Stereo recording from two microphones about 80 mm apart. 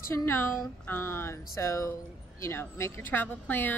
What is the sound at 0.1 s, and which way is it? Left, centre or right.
Speech, left.